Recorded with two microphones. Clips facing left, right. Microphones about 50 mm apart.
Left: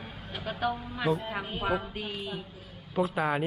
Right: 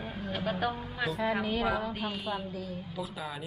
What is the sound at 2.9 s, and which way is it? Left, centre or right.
Speech, left.